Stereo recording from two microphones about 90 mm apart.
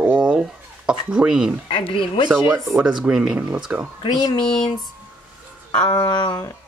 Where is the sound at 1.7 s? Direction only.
75° left (ahead or behind).